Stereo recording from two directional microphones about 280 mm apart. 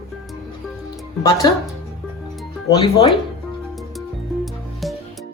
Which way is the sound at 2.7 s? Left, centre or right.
Centre.